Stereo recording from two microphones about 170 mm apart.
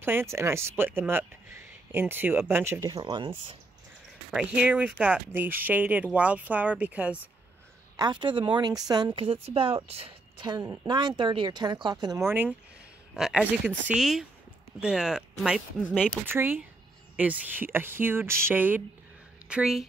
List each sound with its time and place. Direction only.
0.0 s speech: 15° right (ahead or behind); by 3.5 s 30° right (ahead or behind)
4.3 s speech: 5° right (ahead or behind)
7.9 s a woman's voice: 25° right (ahead or behind); by 19.9 s centre (ahead or behind)